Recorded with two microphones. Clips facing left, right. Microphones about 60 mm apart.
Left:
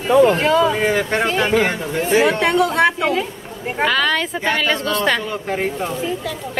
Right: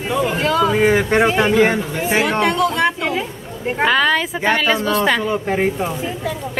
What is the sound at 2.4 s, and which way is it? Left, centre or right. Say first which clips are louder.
Speech: even; left.